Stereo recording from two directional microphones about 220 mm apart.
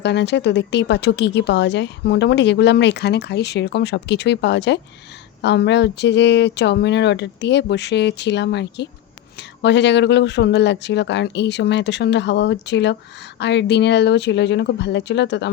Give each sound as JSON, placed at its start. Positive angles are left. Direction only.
{"t": 0.0, "sound": "speech", "side_deg": 50}